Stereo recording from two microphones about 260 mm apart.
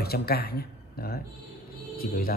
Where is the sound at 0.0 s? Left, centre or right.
Left.